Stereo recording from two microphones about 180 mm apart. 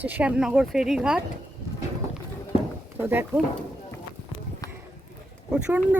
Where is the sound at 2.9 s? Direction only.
10° right (ahead or behind).